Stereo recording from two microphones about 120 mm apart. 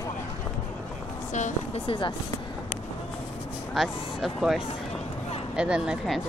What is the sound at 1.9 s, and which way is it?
Speech, 45° left (ahead or behind).